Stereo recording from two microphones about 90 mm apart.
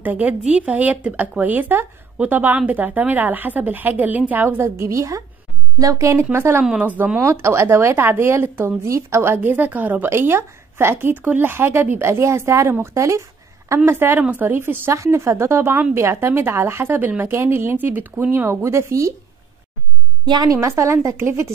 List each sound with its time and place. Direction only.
0.0 s a woman's voice: 20° right (ahead or behind)
6.6 s speech: 5° right (ahead or behind)
6.9 s a woman's voice: 20° right (ahead or behind); by 19.1 s 35° right (ahead or behind)
20.2 s a woman's voice: 50° right (ahead or behind)
20.6 s a woman's voice: 30° right (ahead or behind)